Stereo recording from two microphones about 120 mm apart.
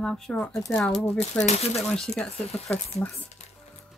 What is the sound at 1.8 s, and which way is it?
Speech, 5° left (ahead or behind).